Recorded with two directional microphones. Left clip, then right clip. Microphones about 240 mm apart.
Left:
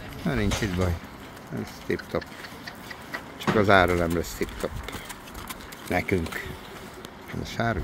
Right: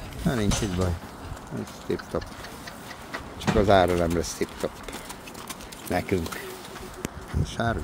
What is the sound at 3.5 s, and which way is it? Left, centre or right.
Speech, centre.